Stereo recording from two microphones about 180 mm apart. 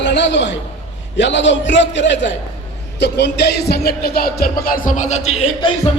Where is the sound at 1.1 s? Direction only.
85° left.